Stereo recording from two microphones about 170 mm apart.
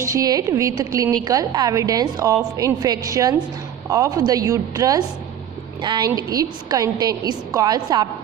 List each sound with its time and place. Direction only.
0.0 s a woman's voice: 20° right (ahead or behind)